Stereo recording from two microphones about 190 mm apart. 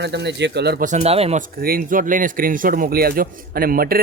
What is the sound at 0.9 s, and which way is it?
Speech, 35° right (ahead or behind).